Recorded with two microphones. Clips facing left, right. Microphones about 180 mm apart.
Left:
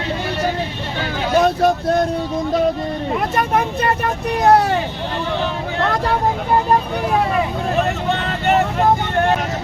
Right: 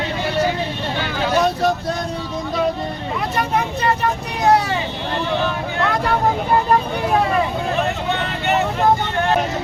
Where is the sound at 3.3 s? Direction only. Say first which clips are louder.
Even; 50° left (ahead or behind).